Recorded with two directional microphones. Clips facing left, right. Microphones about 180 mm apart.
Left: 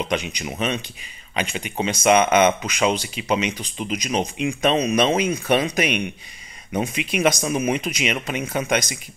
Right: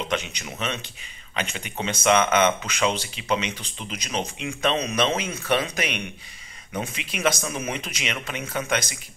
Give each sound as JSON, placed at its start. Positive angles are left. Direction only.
{"t": 0.1, "sound": "speech", "side_deg": 15}